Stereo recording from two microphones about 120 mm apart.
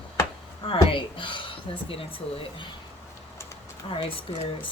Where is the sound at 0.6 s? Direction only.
45° left (ahead or behind).